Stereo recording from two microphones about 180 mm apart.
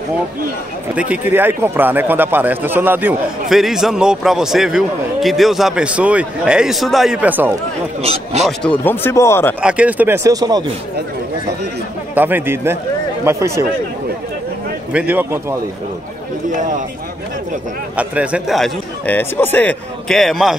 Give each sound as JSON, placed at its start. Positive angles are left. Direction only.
{"t": 0.9, "sound": "a man's voice", "side_deg": -5}
{"t": 8.0, "sound": "speech", "side_deg": -35}
{"t": 8.5, "sound": "speech", "side_deg": 10}
{"t": 9.6, "sound": "a man's voice", "side_deg": -5}
{"t": 12.2, "sound": "a man's voice", "side_deg": -10}
{"t": 14.9, "sound": "a man's voice", "side_deg": -10}
{"t": 17.9, "sound": "a man's voice", "side_deg": -5}